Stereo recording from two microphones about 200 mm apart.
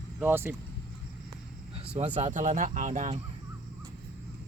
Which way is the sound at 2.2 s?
40° right (ahead or behind).